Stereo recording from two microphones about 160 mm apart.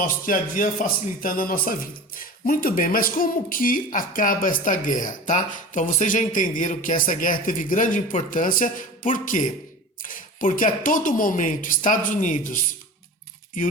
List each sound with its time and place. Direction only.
0.0 s speech: 60° left (ahead or behind)